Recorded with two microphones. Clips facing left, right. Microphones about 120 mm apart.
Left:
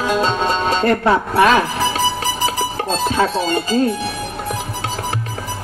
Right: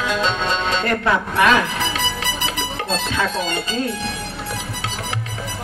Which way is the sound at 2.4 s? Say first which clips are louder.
Left 6 dB; 40° left (ahead or behind).